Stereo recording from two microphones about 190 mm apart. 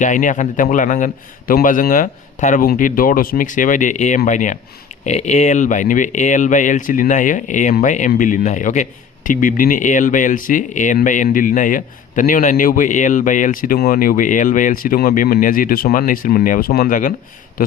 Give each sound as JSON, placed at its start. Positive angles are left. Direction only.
{"t": 0.0, "sound": "speech", "side_deg": 40}